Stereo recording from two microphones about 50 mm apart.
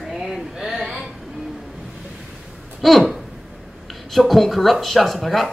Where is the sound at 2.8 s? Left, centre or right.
Centre.